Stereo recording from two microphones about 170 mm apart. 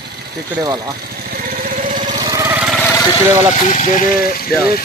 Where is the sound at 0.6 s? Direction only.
20° right (ahead or behind).